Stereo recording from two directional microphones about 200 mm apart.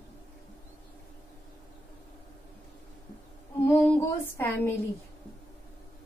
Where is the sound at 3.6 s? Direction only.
10° left (ahead or behind).